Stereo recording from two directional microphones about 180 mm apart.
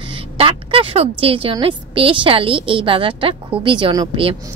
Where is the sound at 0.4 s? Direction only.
30° right (ahead or behind).